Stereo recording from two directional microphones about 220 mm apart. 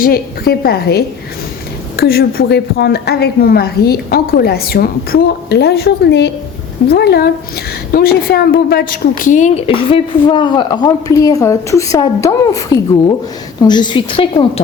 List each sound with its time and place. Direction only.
0.0 s a woman's voice: 45° left (ahead or behind); by 14.6 s 25° left (ahead or behind)